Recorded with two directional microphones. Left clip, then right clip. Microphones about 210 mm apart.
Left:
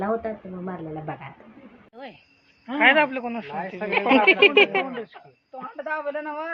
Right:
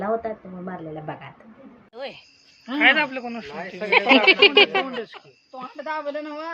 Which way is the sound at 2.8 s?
10° left (ahead or behind).